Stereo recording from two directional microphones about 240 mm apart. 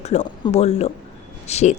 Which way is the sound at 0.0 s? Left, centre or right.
Left.